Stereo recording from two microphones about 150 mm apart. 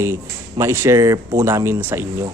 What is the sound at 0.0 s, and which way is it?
A man's voice, 20° right (ahead or behind).